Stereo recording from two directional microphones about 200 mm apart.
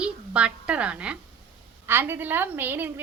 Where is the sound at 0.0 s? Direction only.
5° right (ahead or behind).